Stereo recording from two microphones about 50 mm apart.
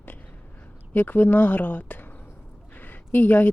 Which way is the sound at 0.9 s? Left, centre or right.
Left.